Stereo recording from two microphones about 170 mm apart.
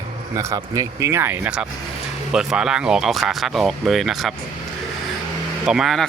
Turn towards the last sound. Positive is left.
turn(degrees=-5)  # may be behind; listen again after turning